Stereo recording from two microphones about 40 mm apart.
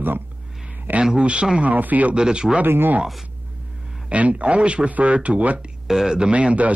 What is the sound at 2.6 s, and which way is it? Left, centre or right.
Speech, right.